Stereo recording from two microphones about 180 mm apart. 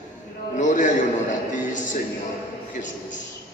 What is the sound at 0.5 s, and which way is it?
Speech, 45° left (ahead or behind).